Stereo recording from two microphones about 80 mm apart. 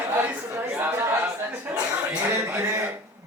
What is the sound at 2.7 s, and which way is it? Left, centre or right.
Speech, centre.